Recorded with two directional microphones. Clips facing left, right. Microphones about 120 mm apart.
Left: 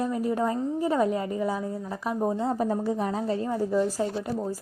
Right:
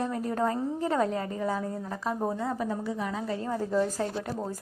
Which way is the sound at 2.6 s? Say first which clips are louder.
Left 5 dB; 40° left (ahead or behind).